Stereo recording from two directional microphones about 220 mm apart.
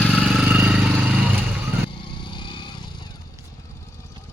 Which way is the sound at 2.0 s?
20° left (ahead or behind).